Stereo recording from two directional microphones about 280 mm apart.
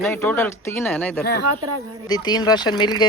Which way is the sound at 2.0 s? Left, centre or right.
Centre.